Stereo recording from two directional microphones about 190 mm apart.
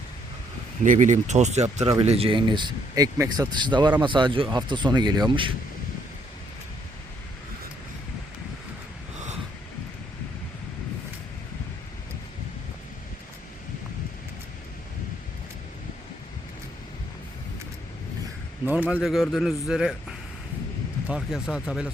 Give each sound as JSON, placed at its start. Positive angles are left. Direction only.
{"t": 0.9, "sound": "speech", "side_deg": -40}
{"t": 18.6, "sound": "a sound", "side_deg": -10}
{"t": 19.0, "sound": "a man's voice", "side_deg": 0}